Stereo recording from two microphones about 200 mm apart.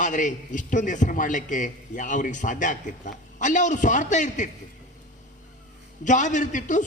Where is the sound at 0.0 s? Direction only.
40° left (ahead or behind).